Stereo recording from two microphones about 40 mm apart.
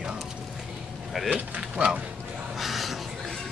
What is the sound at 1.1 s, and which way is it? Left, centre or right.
Speech, centre.